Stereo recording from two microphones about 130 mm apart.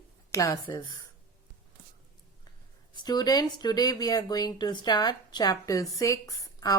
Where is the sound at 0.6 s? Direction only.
40° left (ahead or behind).